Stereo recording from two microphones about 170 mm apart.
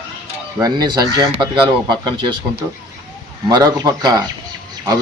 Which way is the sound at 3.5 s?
20° right (ahead or behind).